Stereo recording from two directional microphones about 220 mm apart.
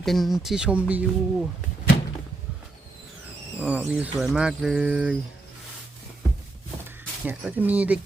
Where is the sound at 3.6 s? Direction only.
5° right (ahead or behind).